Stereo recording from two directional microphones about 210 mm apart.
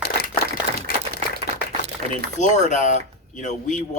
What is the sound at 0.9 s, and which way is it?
Typewriter, 40° left (ahead or behind).